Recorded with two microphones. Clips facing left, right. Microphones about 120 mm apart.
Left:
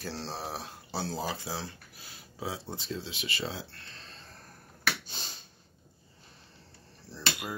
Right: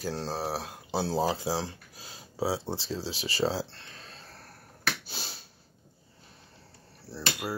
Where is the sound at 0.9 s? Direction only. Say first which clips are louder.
Right 7 dB; 25° right (ahead or behind).